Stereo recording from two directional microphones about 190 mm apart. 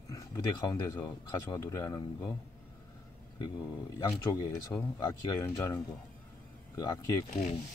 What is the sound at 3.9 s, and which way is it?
Speech, 20° left (ahead or behind).